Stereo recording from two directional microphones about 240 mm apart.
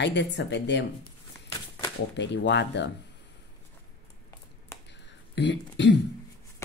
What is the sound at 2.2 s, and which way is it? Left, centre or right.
Speech, left.